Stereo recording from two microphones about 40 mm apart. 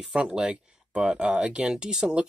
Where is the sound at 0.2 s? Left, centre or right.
Right.